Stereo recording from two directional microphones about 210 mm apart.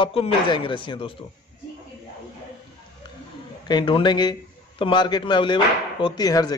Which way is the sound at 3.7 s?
20° left (ahead or behind).